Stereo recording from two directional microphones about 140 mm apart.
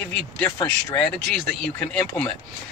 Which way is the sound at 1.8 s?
10° left (ahead or behind).